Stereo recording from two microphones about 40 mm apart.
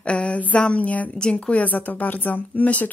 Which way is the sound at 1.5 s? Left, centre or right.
Left.